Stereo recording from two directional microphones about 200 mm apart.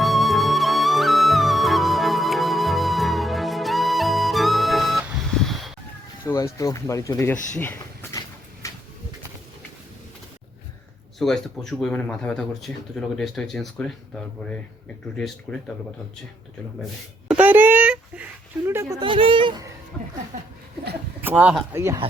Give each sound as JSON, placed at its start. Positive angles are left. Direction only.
{"t": 0.0, "sound": "music", "side_deg": 0}
{"t": 6.2, "sound": "speech", "side_deg": 15}
{"t": 8.6, "sound": "a sound", "side_deg": 15}
{"t": 11.2, "sound": "speech", "side_deg": 0}
{"t": 15.5, "sound": "speech", "side_deg": 5}
{"t": 17.2, "sound": "a sound", "side_deg": -5}
{"t": 21.2, "sound": "speech", "side_deg": -10}